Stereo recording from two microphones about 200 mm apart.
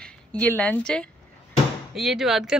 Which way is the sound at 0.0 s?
5° left (ahead or behind).